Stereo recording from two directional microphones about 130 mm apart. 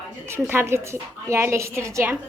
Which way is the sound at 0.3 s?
20° right (ahead or behind).